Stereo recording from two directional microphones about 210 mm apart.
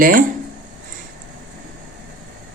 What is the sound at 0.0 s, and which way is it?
Speech, 40° right (ahead or behind).